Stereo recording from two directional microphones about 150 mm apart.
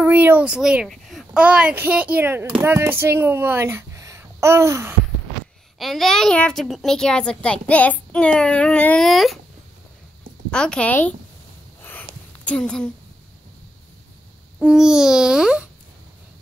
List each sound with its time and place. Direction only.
0.0 s speech: 15° right (ahead or behind)
5.8 s a child's voice: centre (ahead or behind)
10.5 s speech: 5° left (ahead or behind)
11.8 s sniff: 10° left (ahead or behind)
12.4 s a child's voice: 5° left (ahead or behind)
14.6 s a child's voice: 5° right (ahead or behind)